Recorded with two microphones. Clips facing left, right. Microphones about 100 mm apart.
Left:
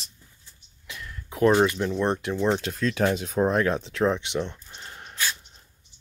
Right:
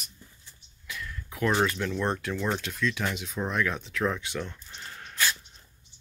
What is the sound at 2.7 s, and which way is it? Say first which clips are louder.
Speech: left 6 dB; 40° left (ahead or behind).